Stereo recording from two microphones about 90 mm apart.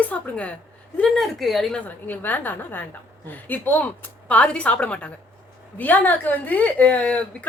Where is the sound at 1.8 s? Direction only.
20° left (ahead or behind).